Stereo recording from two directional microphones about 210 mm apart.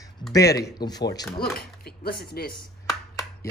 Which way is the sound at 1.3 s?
45° left (ahead or behind).